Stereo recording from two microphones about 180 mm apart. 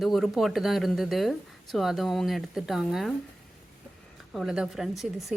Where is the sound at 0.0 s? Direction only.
Centre (ahead or behind).